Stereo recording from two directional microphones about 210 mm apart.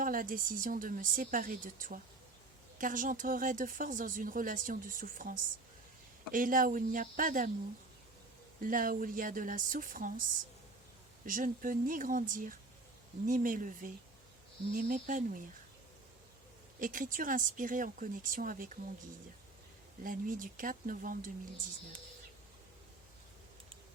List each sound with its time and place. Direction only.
0.0 s speech: 40° right (ahead or behind)
8.6 s speech: 40° right (ahead or behind)
11.3 s speech: 40° right (ahead or behind)
16.8 s speech: 40° right (ahead or behind)
20.1 s speech: 40° right (ahead or behind)